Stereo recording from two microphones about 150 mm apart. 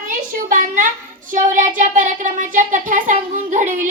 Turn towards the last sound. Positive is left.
turn(degrees=-60)  # may be behind; listen again after turning